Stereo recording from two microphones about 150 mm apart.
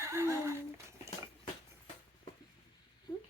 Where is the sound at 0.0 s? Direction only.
20° right (ahead or behind).